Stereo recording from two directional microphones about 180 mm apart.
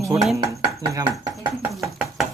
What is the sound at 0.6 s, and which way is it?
Speech, 25° right (ahead or behind).